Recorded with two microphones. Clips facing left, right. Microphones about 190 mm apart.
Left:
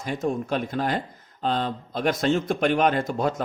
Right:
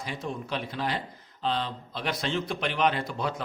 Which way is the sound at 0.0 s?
45° left (ahead or behind).